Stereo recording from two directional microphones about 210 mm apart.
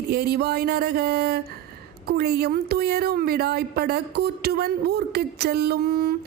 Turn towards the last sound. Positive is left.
turn(degrees=-45)  # may be behind; listen again after turning